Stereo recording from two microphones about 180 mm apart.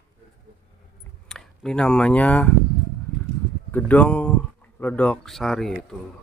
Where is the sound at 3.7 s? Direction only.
10° left (ahead or behind).